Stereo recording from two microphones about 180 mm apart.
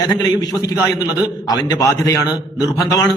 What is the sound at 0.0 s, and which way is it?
Speech, 20° left (ahead or behind).